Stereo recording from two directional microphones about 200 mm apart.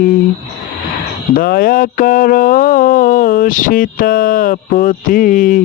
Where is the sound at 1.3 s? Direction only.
45° left (ahead or behind).